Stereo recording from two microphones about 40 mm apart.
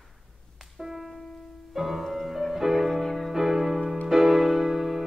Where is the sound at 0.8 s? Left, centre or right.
Centre.